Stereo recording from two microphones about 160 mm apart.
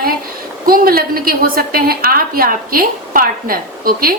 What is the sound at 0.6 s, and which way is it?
A woman's voice, 65° right (ahead or behind).